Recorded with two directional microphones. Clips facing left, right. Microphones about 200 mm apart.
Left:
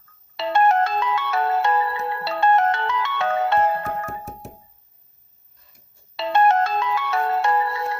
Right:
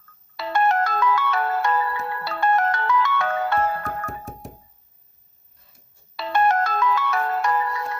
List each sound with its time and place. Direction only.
0.3 s ringtone: 25° left (ahead or behind)
4.0 s music: 5° left (ahead or behind)
6.1 s ringtone: 25° left (ahead or behind)